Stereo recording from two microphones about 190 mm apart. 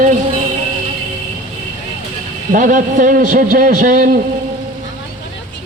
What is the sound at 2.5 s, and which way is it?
A man's voice, 45° right (ahead or behind).